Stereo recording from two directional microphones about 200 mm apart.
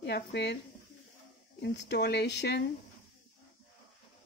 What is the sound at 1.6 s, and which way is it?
Speech, 60° left (ahead or behind).